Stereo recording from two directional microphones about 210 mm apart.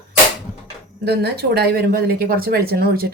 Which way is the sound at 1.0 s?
50° right (ahead or behind).